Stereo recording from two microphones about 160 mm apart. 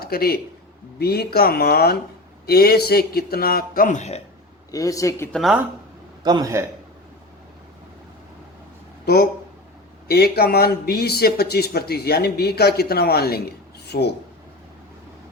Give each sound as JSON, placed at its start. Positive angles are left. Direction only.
{"t": 0.0, "sound": "a man's voice", "side_deg": 70}
{"t": 3.8, "sound": "speech", "side_deg": 45}
{"t": 4.7, "sound": "a man's voice", "side_deg": 20}
{"t": 5.3, "sound": "speech", "side_deg": -5}
{"t": 6.2, "sound": "a man's voice", "side_deg": -25}
{"t": 10.1, "sound": "speech", "side_deg": 75}